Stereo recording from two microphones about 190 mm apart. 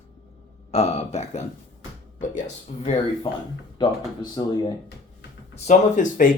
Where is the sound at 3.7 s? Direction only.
20° left (ahead or behind).